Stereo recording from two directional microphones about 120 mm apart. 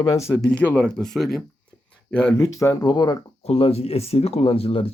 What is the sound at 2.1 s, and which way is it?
Speech, 15° left (ahead or behind).